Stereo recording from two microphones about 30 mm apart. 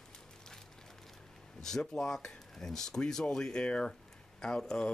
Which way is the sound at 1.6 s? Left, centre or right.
Centre.